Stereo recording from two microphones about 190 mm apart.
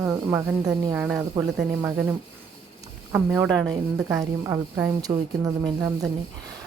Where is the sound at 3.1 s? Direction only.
5° right (ahead or behind).